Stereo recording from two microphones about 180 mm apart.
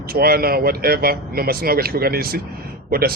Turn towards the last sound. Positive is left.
turn(degrees=-55)  # may be behind; listen again after turning